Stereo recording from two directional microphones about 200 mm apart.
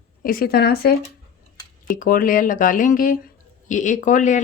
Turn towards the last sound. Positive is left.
turn(degrees=40)  # may be behind; listen again after turning